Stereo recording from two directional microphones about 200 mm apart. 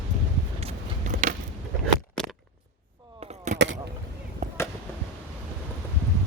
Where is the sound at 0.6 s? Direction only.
40° right (ahead or behind).